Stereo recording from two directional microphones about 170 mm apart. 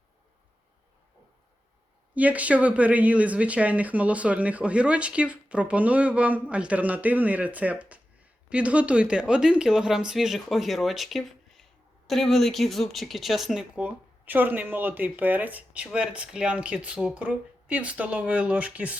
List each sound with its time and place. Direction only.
2.1 s speech: 10° right (ahead or behind)